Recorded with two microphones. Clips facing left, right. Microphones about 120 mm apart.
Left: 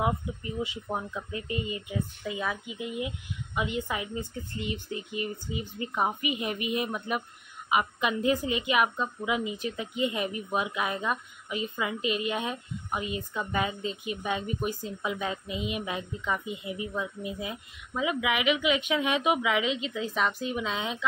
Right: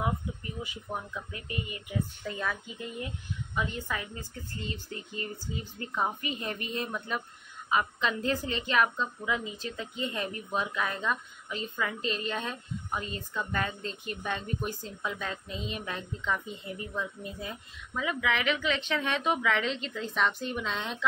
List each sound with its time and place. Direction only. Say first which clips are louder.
0.0 s speech: left 3 dB; 25° left (ahead or behind)
2.2 s a woman's voice: left 2 dB; 10° left (ahead or behind)